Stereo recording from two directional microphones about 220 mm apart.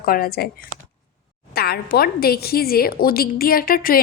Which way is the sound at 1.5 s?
45° left (ahead or behind).